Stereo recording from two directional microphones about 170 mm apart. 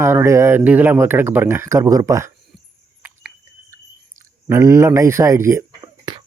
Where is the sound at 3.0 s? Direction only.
10° right (ahead or behind).